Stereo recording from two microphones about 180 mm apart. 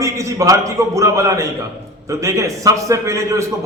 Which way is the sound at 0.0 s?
15° right (ahead or behind).